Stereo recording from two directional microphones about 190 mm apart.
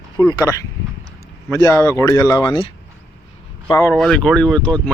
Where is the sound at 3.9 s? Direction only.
Centre (ahead or behind).